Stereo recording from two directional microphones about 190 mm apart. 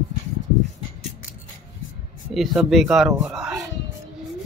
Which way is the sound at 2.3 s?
Centre (ahead or behind).